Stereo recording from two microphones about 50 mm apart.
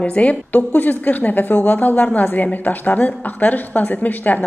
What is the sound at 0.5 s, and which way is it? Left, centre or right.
A woman's voice, left.